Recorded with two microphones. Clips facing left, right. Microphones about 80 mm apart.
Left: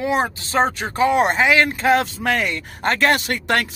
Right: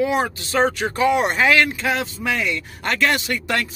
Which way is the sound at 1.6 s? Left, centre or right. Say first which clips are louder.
Left 5 dB; left.